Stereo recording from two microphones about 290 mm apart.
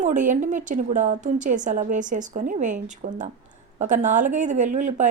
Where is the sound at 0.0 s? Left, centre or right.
Right.